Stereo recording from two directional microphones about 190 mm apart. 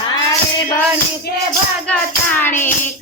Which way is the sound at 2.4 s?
10° left (ahead or behind).